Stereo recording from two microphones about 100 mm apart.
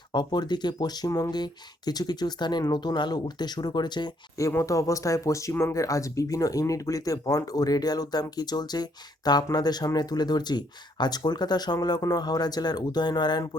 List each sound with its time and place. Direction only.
0.1 s speech: 45° left (ahead or behind)
4.4 s speech: 30° left (ahead or behind)